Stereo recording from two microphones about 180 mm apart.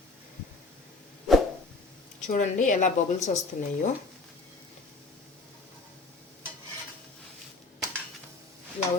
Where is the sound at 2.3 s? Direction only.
45° left (ahead or behind).